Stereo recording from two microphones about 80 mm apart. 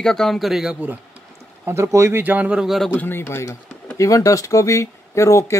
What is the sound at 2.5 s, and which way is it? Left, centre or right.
Speech, centre.